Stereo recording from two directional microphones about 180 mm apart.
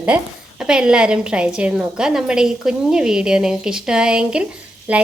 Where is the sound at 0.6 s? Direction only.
5° right (ahead or behind).